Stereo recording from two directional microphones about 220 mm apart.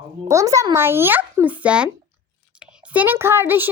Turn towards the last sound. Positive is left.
turn(degrees=-10)  # may be behind; listen again after turning